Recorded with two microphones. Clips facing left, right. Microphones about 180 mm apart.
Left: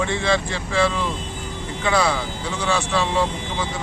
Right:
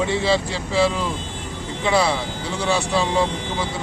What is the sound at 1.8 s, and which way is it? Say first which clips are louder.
Speech: right 1 dB; 25° right (ahead or behind).